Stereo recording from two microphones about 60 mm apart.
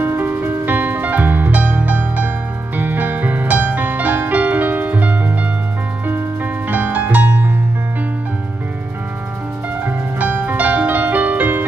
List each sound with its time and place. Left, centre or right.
0.0 s music: right
9.8 s music: right